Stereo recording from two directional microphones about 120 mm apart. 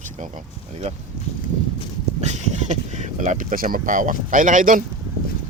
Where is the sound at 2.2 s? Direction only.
80° right.